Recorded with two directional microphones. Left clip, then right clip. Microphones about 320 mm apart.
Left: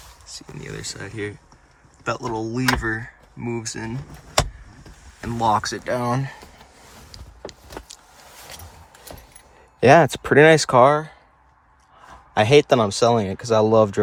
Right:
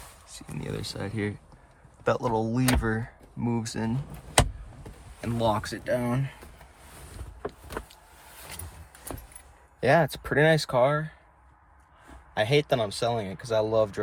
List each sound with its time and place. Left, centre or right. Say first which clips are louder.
0.6 s speech: left 1 dB; centre
5.2 s speech: left 7 dB; centre
9.8 s speech: left 9 dB; left
12.3 s speech: left 9 dB; left